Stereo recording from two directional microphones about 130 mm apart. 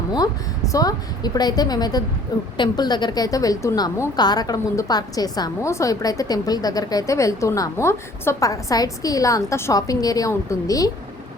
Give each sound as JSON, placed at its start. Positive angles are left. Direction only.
{"t": 0.1, "sound": "a woman's voice", "side_deg": 30}